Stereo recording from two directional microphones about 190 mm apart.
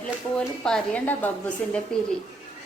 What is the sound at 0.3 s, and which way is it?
A woman's voice, 5° left (ahead or behind).